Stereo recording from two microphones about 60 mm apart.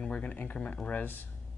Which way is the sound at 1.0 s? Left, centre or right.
Left.